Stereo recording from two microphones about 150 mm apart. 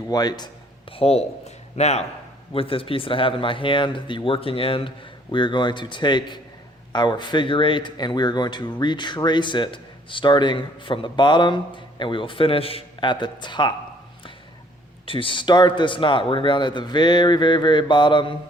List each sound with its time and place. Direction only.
0.1 s speech: 25° left (ahead or behind)
15.0 s speech: 35° left (ahead or behind)